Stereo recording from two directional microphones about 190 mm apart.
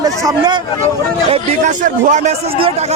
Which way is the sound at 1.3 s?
40° right (ahead or behind).